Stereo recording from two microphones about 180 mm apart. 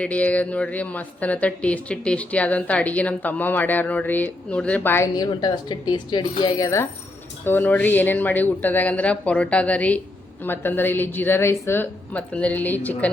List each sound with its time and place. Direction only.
0.0 s a woman's voice: 10° left (ahead or behind)
5.1 s a woman's voice: 20° left (ahead or behind)